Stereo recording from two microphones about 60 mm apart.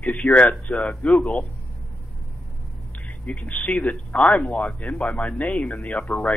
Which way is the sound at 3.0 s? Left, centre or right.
Left.